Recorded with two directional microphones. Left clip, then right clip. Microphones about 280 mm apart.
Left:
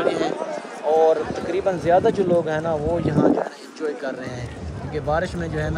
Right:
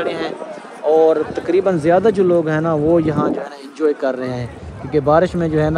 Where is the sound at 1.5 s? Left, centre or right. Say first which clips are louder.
Right 5 dB; right.